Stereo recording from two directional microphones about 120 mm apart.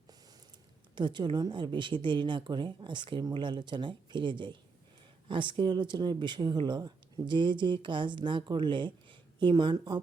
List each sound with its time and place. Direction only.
0.9 s speech: 40° right (ahead or behind)